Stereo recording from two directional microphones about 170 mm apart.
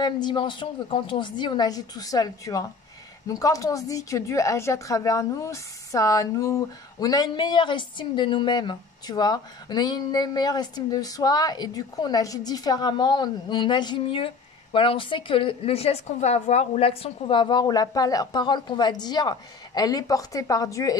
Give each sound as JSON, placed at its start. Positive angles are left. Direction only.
{"t": 0.0, "sound": "speech", "side_deg": 25}